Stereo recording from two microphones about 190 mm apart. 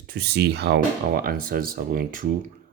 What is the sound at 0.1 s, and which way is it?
Speech, 55° right (ahead or behind).